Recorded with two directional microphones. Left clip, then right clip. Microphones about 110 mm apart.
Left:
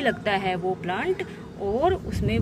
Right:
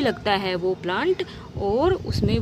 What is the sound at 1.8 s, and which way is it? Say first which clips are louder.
Speech: right 1 dB; 45° right (ahead or behind).